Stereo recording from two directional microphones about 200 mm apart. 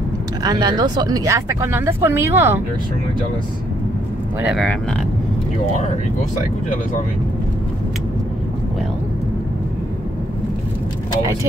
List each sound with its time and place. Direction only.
0.4 s speech: 20° right (ahead or behind)
4.4 s speech: 5° right (ahead or behind)